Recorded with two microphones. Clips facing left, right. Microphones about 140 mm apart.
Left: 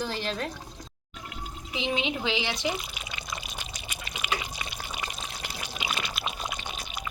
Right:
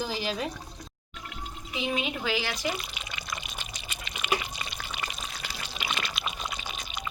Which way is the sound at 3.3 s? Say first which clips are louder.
Left 1 dB; 10° left (ahead or behind).